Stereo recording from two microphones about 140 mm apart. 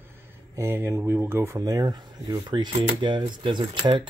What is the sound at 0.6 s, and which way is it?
Speech, 15° right (ahead or behind).